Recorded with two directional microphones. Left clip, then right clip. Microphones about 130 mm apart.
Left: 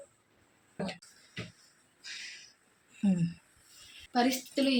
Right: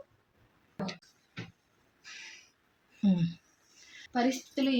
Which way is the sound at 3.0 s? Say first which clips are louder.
Right 1 dB; 10° right (ahead or behind).